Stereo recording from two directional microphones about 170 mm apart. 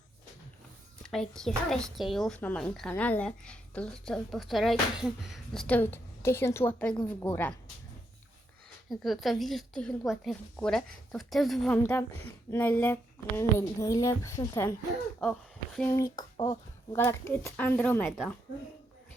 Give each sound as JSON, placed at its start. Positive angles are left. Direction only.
{"t": 1.0, "sound": "speech", "side_deg": 5}
{"t": 5.6, "sound": "speech", "side_deg": 10}
{"t": 8.9, "sound": "speech", "side_deg": 0}
{"t": 15.2, "sound": "a sound", "side_deg": 0}
{"t": 16.1, "sound": "speech", "side_deg": 25}